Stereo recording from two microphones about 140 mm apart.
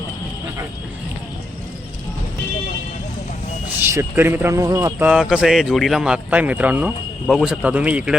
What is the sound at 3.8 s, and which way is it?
Speech, 15° right (ahead or behind).